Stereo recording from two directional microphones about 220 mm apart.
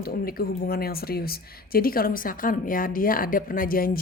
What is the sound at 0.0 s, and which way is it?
Speech, 40° left (ahead or behind).